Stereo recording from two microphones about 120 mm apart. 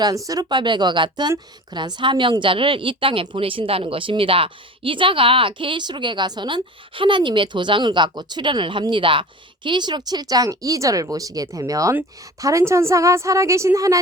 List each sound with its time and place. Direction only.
0.3 s a woman's voice: 35° right (ahead or behind)